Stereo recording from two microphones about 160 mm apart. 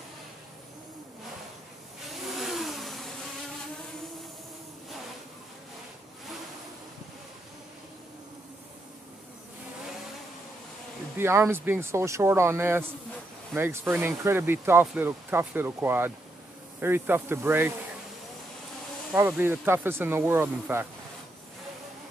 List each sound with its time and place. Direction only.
2.0 s vehicle: centre (ahead or behind)
11.1 s speech: 15° right (ahead or behind)
13.9 s speech: 15° right (ahead or behind)
19.1 s speech: 15° right (ahead or behind)